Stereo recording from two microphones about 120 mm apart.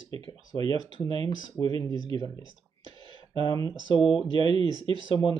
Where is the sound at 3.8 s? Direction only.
45° left (ahead or behind).